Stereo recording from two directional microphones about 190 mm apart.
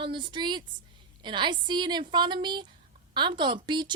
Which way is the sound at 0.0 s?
25° right (ahead or behind).